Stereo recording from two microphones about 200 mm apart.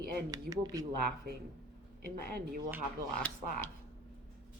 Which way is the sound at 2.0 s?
50° right (ahead or behind).